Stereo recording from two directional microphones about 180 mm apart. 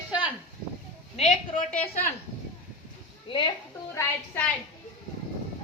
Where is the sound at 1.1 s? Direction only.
35° left (ahead or behind).